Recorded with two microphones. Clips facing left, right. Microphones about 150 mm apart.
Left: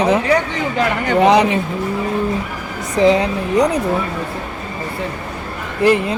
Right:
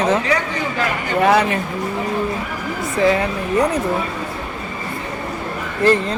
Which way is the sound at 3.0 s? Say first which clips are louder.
Left 4 dB; 20° left (ahead or behind).